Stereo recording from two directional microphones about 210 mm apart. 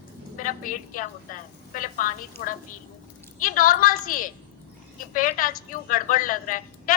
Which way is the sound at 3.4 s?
40° left (ahead or behind).